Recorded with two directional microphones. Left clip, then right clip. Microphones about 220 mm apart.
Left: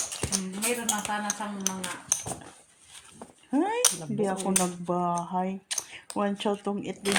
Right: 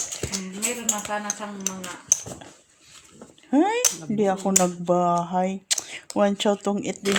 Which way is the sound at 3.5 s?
55° right (ahead or behind).